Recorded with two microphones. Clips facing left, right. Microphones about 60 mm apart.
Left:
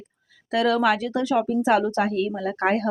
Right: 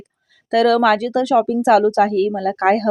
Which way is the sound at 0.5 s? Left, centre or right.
Right.